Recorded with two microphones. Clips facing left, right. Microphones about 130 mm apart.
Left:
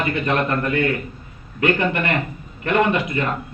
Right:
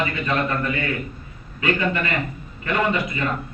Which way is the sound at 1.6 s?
65° left (ahead or behind).